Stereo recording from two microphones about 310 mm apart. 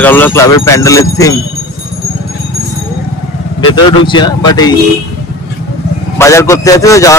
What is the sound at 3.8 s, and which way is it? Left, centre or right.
Speech, centre.